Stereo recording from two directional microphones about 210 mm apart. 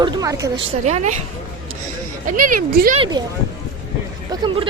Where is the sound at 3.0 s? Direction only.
20° right (ahead or behind).